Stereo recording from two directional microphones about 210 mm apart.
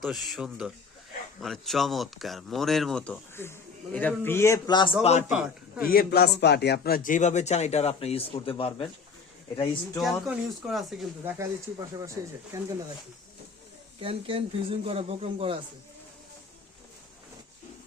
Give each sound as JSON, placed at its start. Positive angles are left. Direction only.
{"t": 0.0, "sound": "speech", "side_deg": 0}
{"t": 5.3, "sound": "speech", "side_deg": -5}
{"t": 5.8, "sound": "speech", "side_deg": 45}
{"t": 10.0, "sound": "speech", "side_deg": 0}
{"t": 11.3, "sound": "speech", "side_deg": -15}
{"t": 14.0, "sound": "speech", "side_deg": -25}